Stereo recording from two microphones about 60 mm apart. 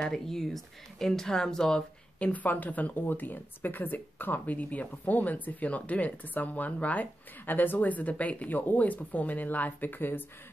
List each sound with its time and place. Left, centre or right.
0.0 s speech: centre
2.1 s speech: left